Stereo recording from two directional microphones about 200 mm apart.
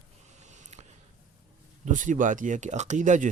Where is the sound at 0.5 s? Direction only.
35° right (ahead or behind).